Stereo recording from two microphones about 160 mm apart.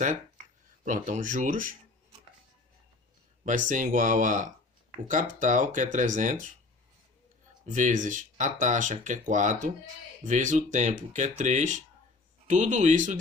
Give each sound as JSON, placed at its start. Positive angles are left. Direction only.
{"t": 0.9, "sound": "speech", "side_deg": -50}
{"t": 3.4, "sound": "speech", "side_deg": -55}
{"t": 7.7, "sound": "speech", "side_deg": -50}